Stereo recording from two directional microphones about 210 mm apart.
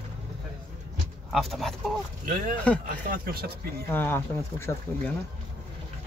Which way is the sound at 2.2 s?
40° right (ahead or behind).